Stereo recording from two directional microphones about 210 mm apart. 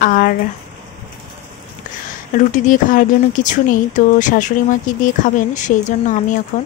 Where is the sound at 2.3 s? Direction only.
35° left (ahead or behind).